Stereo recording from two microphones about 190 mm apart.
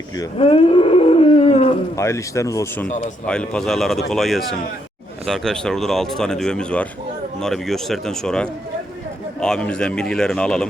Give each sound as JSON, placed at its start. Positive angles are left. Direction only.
{"t": 0.3, "sound": "wild animals", "side_deg": 30}
{"t": 2.0, "sound": "speech", "side_deg": 15}
{"t": 3.2, "sound": "speech", "side_deg": 5}